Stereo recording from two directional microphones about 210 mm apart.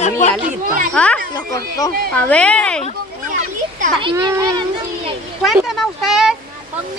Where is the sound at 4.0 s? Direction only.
20° right (ahead or behind).